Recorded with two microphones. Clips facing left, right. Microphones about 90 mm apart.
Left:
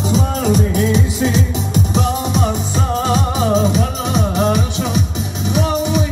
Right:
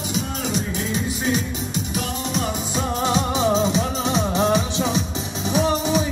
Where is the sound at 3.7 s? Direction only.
25° right (ahead or behind).